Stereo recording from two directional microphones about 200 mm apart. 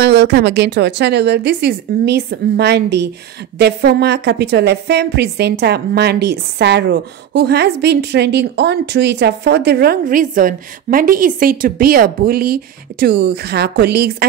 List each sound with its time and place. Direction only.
0.0 s a woman's voice: 55° right (ahead or behind)